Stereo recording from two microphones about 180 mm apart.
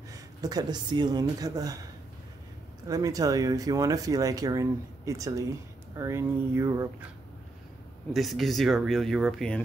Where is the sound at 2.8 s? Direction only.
20° right (ahead or behind).